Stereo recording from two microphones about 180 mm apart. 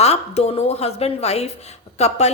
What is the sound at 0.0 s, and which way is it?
A woman's voice, 35° left (ahead or behind).